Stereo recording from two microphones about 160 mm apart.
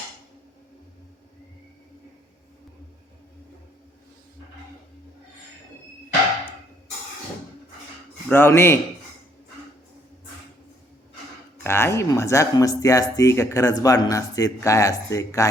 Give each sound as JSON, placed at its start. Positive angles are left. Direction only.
{"t": 8.3, "sound": "a man's voice", "side_deg": 15}
{"t": 11.6, "sound": "speech", "side_deg": 15}